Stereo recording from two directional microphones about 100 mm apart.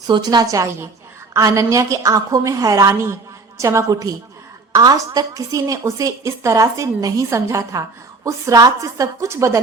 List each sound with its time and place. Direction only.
0.1 s a woman's voice: 45° right (ahead or behind)